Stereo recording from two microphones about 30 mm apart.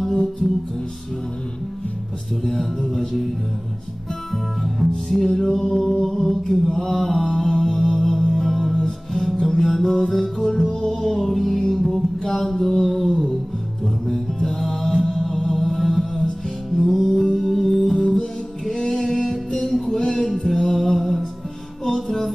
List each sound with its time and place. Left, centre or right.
2.9 s music: centre
4.6 s music: centre
5.7 s mantra: centre
7.3 s music: centre
8.7 s music: centre
9.2 s music: centre
17.9 s music: centre